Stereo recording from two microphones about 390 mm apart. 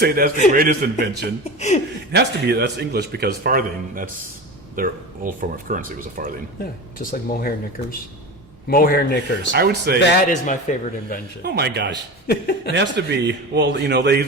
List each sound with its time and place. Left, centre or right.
0.0 s a man's voice: right
1.5 s speech: centre
2.1 s a man's voice: right
7.0 s a man's voice: left
9.5 s a man's voice: right
10.0 s a man's voice: centre
11.4 s a man's voice: right
12.3 s a man's voice: left
12.7 s a man's voice: right